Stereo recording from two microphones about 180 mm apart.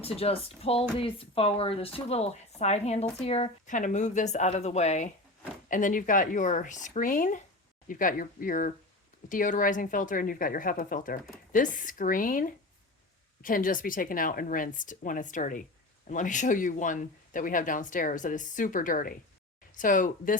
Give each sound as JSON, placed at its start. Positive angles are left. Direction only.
{"t": 0.0, "sound": "speech", "side_deg": 35}